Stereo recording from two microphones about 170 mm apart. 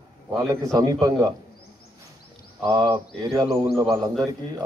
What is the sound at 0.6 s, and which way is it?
Speech, 20° right (ahead or behind).